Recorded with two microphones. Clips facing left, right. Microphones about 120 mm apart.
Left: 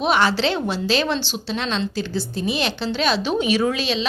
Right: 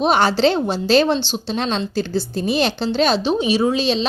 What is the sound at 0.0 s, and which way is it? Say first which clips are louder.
A woman's voice: right 4 dB; 35° right (ahead or behind).